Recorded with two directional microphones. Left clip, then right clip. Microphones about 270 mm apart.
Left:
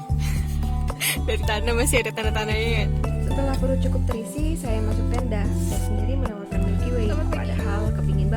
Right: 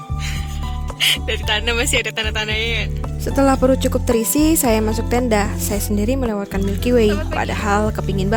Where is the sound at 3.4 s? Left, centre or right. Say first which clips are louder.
Right 12 dB; right.